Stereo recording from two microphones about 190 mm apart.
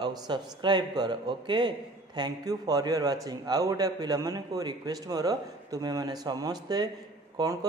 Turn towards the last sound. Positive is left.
turn(degrees=-20)  # may be behind; listen again after turning